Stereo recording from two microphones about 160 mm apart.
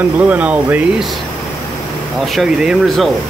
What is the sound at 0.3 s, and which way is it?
Speech, 10° right (ahead or behind).